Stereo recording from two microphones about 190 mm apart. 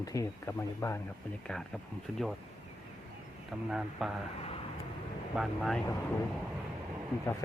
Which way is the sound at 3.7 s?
Centre (ahead or behind).